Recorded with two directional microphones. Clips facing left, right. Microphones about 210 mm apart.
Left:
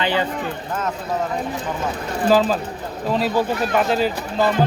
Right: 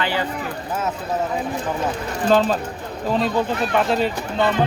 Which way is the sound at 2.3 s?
Centre (ahead or behind).